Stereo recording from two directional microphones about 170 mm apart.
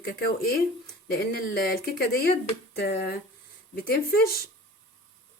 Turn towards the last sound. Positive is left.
turn(degrees=65)  # may be behind; listen again after turning